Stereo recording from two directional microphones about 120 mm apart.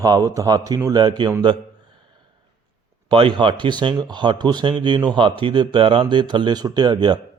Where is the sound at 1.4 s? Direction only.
40° right (ahead or behind).